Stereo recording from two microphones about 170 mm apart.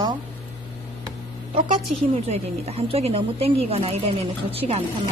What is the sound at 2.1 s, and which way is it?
Speech, 40° right (ahead or behind).